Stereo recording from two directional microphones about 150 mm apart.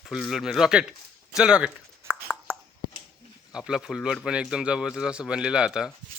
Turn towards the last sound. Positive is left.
turn(degrees=-5)  # may be behind; listen again after turning